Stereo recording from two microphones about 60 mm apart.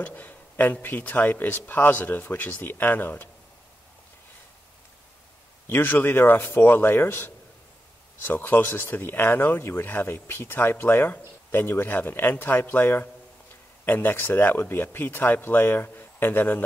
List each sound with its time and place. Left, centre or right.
0.0 s speech: left
5.7 s speech: left